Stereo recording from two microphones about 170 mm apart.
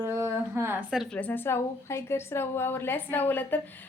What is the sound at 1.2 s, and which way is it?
A woman's voice, 10° left (ahead or behind).